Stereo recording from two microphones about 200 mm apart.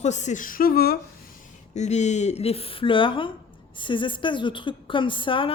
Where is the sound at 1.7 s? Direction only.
35° left (ahead or behind).